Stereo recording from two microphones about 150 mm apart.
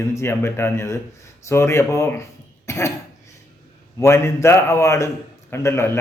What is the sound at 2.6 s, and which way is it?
Cough, 20° left (ahead or behind).